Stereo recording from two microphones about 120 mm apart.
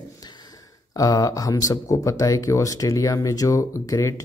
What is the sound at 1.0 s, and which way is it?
Speech, 30° left (ahead or behind).